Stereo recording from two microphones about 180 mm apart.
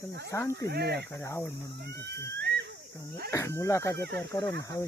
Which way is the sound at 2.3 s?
65° right (ahead or behind).